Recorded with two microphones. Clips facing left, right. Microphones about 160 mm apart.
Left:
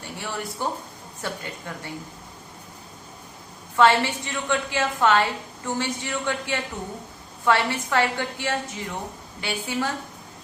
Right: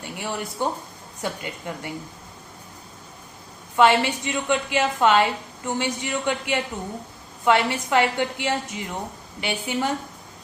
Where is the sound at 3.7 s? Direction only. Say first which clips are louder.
Right 1 dB; 15° right (ahead or behind).